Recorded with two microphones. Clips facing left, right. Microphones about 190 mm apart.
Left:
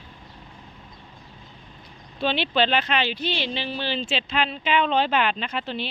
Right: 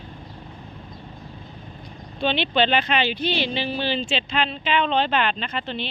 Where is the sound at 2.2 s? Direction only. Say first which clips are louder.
Right 1 dB; 5° left (ahead or behind).